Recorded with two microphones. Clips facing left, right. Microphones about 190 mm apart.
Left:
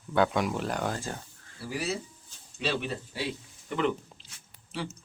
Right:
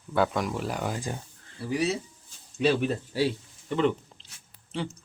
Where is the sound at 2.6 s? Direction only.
50° right (ahead or behind).